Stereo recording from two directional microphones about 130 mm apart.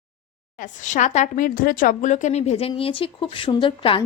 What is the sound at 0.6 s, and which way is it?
A woman's voice, 75° left (ahead or behind).